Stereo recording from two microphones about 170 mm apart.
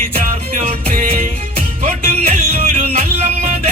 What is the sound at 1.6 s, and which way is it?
Music, 40° right (ahead or behind).